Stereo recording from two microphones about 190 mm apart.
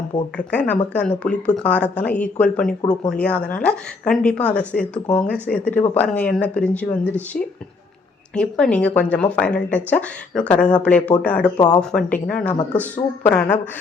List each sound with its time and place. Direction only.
0.3 s a woman's voice: 5° left (ahead or behind)
2.8 s speech: 20° left (ahead or behind)
3.1 s a woman's voice: 5° left (ahead or behind)
11.5 s speech: 20° left (ahead or behind)
11.8 s a woman's voice: 5° left (ahead or behind)